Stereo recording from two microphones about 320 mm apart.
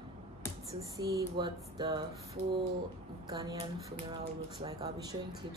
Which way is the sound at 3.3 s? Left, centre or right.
Centre.